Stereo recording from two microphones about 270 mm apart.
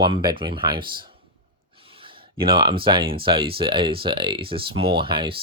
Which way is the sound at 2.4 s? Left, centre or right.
Centre.